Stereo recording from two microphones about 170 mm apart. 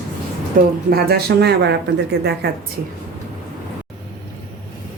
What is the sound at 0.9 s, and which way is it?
Speech, 70° right (ahead or behind).